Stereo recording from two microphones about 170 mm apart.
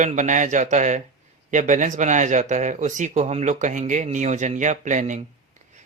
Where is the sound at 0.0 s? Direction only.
45° right (ahead or behind).